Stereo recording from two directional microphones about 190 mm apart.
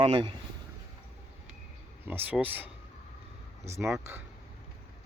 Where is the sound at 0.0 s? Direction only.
30° right (ahead or behind).